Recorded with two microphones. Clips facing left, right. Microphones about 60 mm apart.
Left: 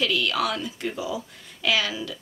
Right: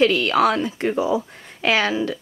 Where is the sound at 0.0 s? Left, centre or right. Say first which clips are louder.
Right 8 dB; right.